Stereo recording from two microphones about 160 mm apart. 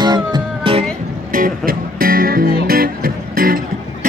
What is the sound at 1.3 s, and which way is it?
Music, 60° right (ahead or behind).